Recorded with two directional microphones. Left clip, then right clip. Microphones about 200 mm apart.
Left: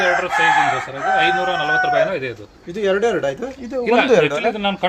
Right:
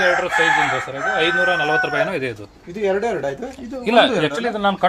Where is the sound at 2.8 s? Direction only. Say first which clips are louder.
Left 3 dB; 45° left (ahead or behind).